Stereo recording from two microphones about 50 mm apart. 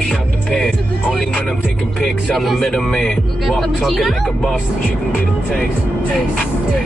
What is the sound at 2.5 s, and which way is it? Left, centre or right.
Speech, centre.